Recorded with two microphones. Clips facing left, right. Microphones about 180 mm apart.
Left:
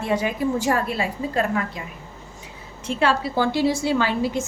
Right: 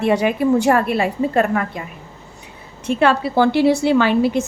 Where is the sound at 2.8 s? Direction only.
60° right (ahead or behind).